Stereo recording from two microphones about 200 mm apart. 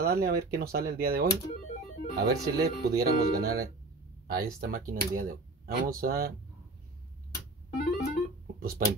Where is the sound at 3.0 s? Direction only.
50° right (ahead or behind).